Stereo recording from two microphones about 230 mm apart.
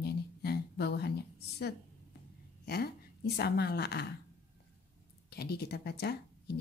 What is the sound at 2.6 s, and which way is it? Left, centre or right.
A woman's voice, left.